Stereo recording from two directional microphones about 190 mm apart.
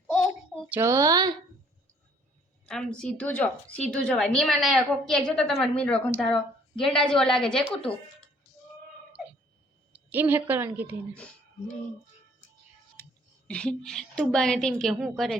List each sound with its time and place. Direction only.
0.1 s a sound: 5° left (ahead or behind)
0.7 s a woman's voice: 15° right (ahead or behind)
2.6 s a woman's voice: 5° left (ahead or behind)
9.9 s a woman's voice: 10° right (ahead or behind)
13.0 s whispering: 10° left (ahead or behind)
13.5 s a woman's voice: 5° left (ahead or behind)